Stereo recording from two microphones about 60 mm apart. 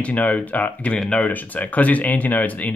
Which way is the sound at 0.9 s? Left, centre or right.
Centre.